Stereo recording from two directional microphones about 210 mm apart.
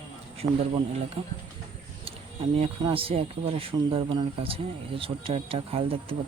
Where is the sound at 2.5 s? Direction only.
25° right (ahead or behind).